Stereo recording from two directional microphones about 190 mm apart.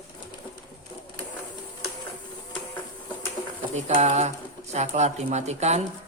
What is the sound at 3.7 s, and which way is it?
Speech, 35° right (ahead or behind).